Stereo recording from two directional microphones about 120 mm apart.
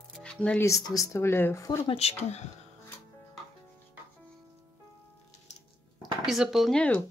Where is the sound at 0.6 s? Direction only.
25° left (ahead or behind).